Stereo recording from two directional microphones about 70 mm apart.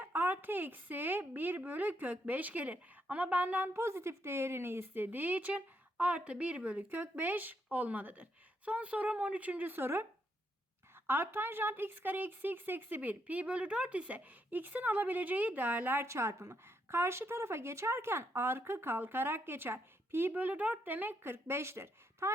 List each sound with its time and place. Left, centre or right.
0.0 s speech: right
3.8 s speech: right